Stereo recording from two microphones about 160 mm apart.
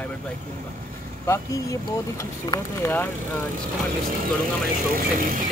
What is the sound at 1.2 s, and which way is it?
Speech, 20° left (ahead or behind).